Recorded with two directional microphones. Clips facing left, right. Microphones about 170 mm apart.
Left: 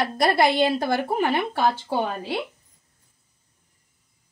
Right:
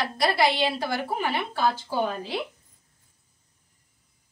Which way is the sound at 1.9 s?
60° left (ahead or behind).